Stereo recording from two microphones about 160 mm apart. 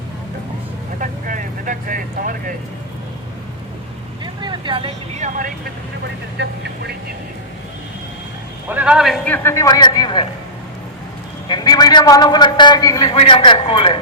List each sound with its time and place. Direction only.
0.9 s vehicle: 55° right (ahead or behind)
4.2 s vehicle: 30° right (ahead or behind)
5.1 s speech: 50° right (ahead or behind)
6.4 s speech: 90° right
8.7 s a man's voice: 5° right (ahead or behind); by 10.2 s 25° left (ahead or behind)
11.4 s a man's voice: 25° left (ahead or behind)